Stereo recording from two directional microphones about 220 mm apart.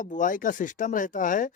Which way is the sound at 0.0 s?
35° left (ahead or behind).